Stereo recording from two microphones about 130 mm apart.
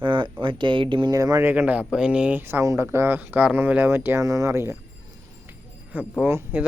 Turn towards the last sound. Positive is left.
turn(degrees=-15)  # may be behind; listen again after turning